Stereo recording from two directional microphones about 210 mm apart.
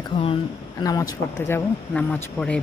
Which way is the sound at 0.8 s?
15° left (ahead or behind).